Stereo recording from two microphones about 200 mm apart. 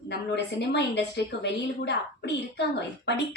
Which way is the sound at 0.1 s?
55° left (ahead or behind).